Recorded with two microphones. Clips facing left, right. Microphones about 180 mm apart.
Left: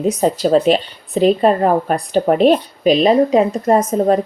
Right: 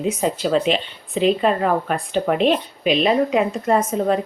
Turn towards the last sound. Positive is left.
turn(degrees=40)  # may be behind; listen again after turning